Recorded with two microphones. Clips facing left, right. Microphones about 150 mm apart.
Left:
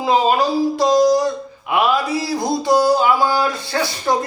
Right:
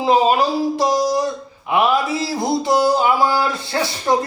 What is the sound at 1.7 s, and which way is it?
Speech, 25° right (ahead or behind).